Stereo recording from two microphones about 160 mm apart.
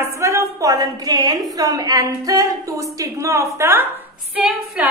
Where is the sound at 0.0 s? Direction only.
15° right (ahead or behind).